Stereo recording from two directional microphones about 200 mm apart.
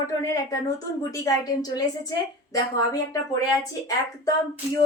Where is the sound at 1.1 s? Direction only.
20° left (ahead or behind).